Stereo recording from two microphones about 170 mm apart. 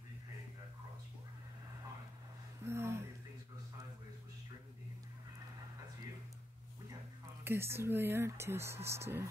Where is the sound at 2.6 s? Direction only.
15° right (ahead or behind).